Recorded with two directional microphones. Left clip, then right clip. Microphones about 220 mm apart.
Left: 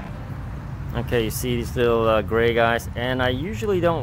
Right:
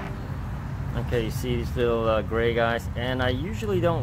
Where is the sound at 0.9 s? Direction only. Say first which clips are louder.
Left 5 dB; 25° left (ahead or behind).